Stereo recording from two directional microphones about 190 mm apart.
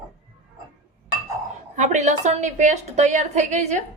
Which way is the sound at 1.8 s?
40° right (ahead or behind).